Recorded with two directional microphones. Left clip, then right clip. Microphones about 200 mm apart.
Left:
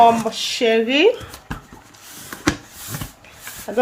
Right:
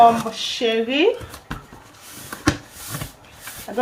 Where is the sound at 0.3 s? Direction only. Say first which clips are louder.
Left 3 dB; 60° left (ahead or behind).